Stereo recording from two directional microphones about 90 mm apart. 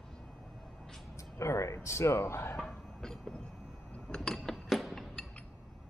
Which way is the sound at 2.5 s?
5° left (ahead or behind).